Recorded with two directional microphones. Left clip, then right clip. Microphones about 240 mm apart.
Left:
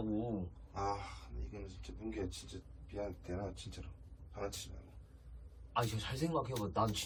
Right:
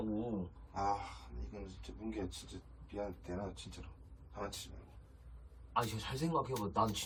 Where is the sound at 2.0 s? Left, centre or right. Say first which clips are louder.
Even; right.